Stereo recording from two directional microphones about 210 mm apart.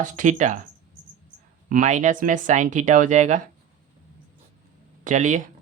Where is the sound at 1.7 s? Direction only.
35° right (ahead or behind).